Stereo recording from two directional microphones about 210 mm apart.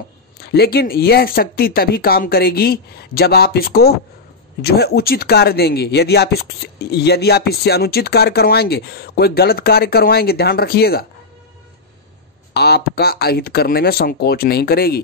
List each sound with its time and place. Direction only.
0.4 s speech: 50° left (ahead or behind)
12.5 s speech: 50° left (ahead or behind)